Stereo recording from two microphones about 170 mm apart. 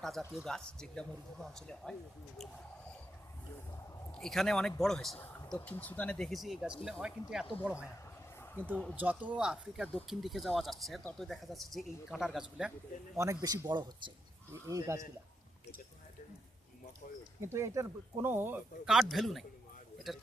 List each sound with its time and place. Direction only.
0.0 s speech: centre (ahead or behind)
4.1 s speech: 5° left (ahead or behind)
8.4 s a sound: 10° left (ahead or behind)
9.0 s speech: 10° right (ahead or behind)
13.1 s speech: 20° right (ahead or behind)
17.4 s speech: 15° right (ahead or behind)
18.9 s speech: centre (ahead or behind)